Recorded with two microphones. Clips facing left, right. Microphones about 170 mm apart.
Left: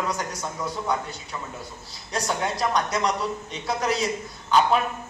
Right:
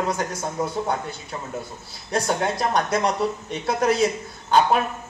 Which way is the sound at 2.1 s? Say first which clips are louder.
Right 4 dB; 55° right (ahead or behind).